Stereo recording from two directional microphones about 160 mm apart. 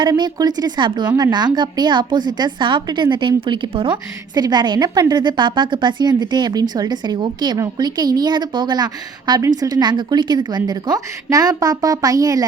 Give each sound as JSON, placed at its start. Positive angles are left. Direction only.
{"t": 0.0, "sound": "a woman's voice", "side_deg": -25}